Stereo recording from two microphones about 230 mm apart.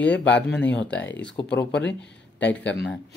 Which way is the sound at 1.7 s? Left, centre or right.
Left.